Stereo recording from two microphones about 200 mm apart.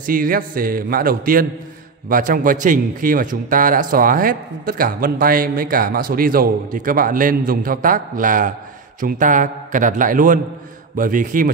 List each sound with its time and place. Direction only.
0.0 s a man's voice: 45° right (ahead or behind)